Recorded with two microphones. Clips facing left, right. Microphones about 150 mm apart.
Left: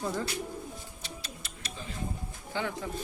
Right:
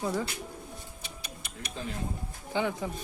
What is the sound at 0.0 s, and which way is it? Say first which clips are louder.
Speech: right 2 dB; 5° right (ahead or behind).